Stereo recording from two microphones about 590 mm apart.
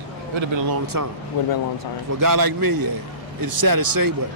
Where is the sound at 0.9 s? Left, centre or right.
Right.